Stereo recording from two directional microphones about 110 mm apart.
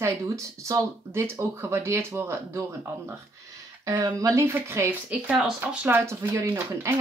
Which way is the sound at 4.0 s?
30° right (ahead or behind).